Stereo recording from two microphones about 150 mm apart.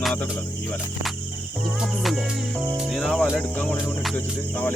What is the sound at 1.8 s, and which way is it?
Music, centre (ahead or behind).